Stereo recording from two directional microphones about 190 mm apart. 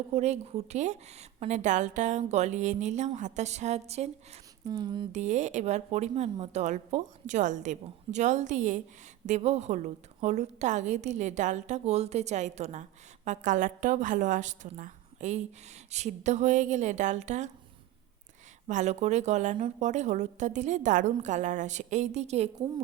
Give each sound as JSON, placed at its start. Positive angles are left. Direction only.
{"t": 0.1, "sound": "speech", "side_deg": -35}
{"t": 4.6, "sound": "a sound", "side_deg": -20}
{"t": 5.1, "sound": "speech", "side_deg": -40}
{"t": 18.7, "sound": "speech", "side_deg": -40}